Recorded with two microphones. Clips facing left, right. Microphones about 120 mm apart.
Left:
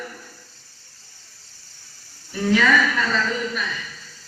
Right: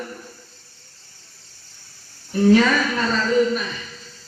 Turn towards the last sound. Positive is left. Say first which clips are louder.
# right 7 dB
turn(degrees=-35)  # may be behind; listen again after turning